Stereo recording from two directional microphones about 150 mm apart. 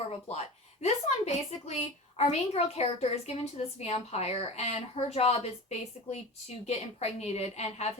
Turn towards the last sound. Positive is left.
turn(degrees=45)  # may be behind; listen again after turning